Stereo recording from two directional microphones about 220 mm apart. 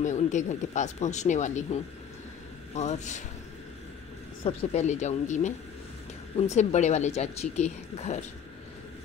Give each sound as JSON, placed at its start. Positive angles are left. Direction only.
{"t": 0.0, "sound": "speech", "side_deg": 35}
{"t": 4.4, "sound": "speech", "side_deg": 30}